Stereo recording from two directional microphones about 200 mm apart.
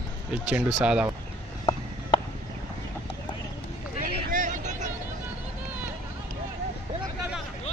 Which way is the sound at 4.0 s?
40° right (ahead or behind).